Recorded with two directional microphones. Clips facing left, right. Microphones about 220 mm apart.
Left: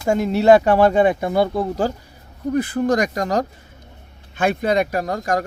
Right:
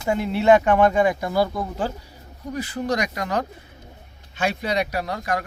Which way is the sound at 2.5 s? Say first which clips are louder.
Left 6 dB; 55° left (ahead or behind).